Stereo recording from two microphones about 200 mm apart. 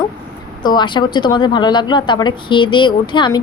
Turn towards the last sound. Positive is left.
turn(degrees=20)  # may be behind; listen again after turning